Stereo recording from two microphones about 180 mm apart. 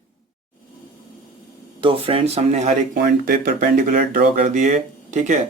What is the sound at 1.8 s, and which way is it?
A man's voice, 30° right (ahead or behind).